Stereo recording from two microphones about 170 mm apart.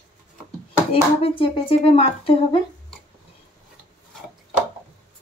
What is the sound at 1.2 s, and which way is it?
A woman's voice, 30° left (ahead or behind).